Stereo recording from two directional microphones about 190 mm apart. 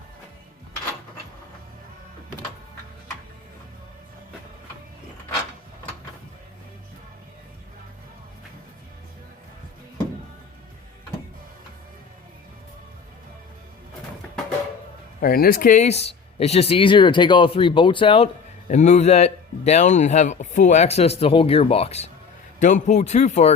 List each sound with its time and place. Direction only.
15.2 s a man's voice: 50° left (ahead or behind); by 18.3 s 30° left (ahead or behind)
18.7 s a man's voice: 40° left (ahead or behind)